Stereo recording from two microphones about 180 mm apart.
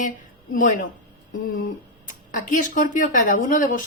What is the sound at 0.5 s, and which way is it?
A woman's voice, 50° left (ahead or behind).